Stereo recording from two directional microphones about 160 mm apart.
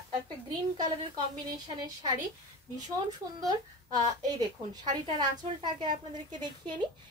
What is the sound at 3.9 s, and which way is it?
A woman's voice, 25° right (ahead or behind).